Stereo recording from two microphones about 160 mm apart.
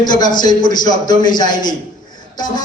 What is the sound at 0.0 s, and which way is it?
A man's voice, 25° left (ahead or behind).